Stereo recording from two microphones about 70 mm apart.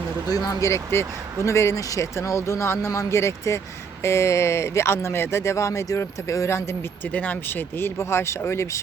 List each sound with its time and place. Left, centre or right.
0.3 s speech: left
0.7 s speech: left
7.0 s speech: left